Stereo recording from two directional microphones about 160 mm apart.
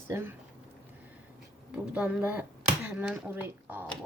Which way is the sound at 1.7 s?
10° right (ahead or behind).